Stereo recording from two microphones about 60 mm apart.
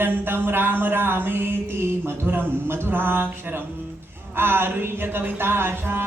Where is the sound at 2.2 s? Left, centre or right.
Right.